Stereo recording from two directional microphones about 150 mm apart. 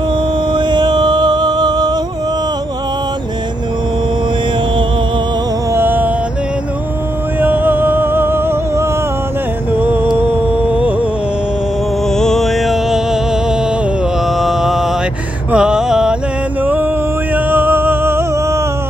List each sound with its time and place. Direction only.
0.5 s music: 30° right (ahead or behind)
5.7 s music: 15° right (ahead or behind)
7.3 s music: 10° right (ahead or behind)
12.2 s music: centre (ahead or behind)
14.4 s mantra: centre (ahead or behind)
15.5 s music: 5° right (ahead or behind)
17.5 s music: 15° right (ahead or behind)